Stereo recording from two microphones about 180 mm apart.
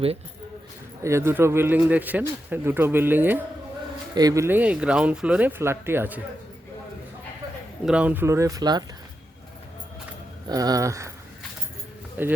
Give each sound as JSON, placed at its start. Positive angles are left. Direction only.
{"t": 1.0, "sound": "speech", "side_deg": -15}
{"t": 7.9, "sound": "speech", "side_deg": -5}
{"t": 10.5, "sound": "speech", "side_deg": -20}
{"t": 12.2, "sound": "speech", "side_deg": -10}